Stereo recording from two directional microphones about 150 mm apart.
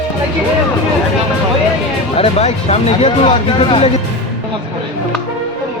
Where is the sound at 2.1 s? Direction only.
45° left (ahead or behind).